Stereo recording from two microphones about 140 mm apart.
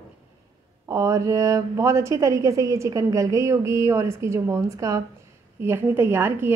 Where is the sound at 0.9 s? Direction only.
20° right (ahead or behind).